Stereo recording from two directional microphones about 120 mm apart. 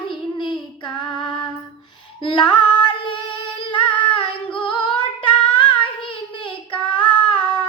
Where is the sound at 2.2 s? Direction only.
40° left (ahead or behind).